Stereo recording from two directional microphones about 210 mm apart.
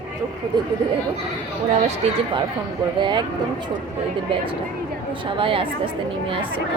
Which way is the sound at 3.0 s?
20° right (ahead or behind).